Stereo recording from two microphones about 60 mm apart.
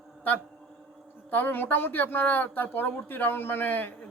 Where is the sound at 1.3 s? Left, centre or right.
Left.